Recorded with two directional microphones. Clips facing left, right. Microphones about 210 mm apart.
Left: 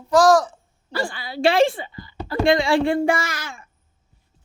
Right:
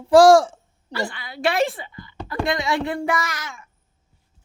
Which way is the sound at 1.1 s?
30° left (ahead or behind).